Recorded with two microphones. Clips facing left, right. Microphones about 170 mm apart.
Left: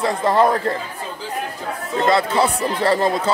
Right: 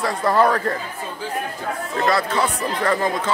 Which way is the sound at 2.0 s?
30° left (ahead or behind).